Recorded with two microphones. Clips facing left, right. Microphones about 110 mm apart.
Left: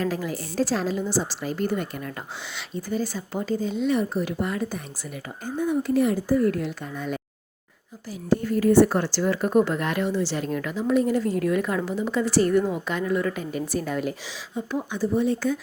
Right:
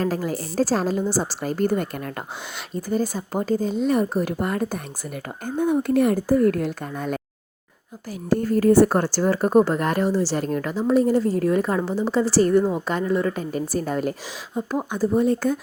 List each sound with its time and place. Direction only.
0.0 s a woman's voice: 40° right (ahead or behind)
8.3 s speech: 45° right (ahead or behind)